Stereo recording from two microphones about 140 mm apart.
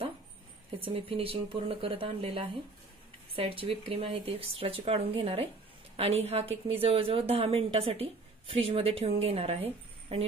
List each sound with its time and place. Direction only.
0.7 s a woman's voice: 40° right (ahead or behind)